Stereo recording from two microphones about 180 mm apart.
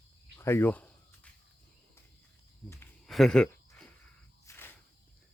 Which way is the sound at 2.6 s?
5° left (ahead or behind).